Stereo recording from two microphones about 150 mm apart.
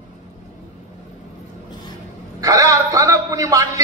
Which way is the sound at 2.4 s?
25° right (ahead or behind).